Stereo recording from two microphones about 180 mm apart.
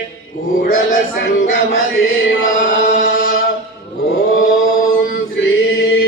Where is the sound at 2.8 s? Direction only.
50° left (ahead or behind).